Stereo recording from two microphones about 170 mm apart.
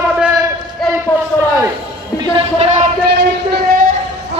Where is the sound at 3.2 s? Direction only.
70° right (ahead or behind).